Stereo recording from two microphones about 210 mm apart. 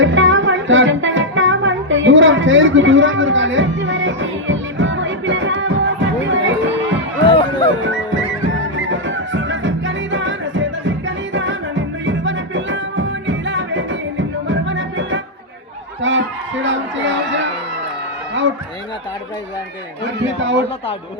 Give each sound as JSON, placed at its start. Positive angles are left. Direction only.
{"t": 0.0, "sound": "music", "side_deg": -65}
{"t": 7.3, "sound": "music", "side_deg": 25}
{"t": 7.7, "sound": "music", "side_deg": -65}
{"t": 16.0, "sound": "a sound", "side_deg": -65}